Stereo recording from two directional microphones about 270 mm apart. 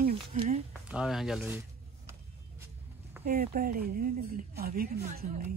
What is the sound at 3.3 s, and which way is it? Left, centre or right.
A woman's voice, right.